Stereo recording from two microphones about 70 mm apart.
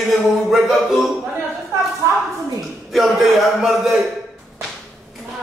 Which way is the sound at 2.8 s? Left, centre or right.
Centre.